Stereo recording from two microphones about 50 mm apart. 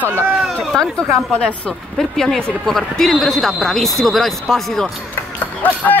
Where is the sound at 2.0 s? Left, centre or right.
Centre.